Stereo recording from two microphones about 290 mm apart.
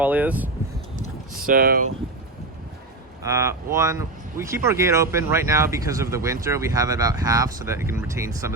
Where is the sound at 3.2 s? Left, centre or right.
Centre.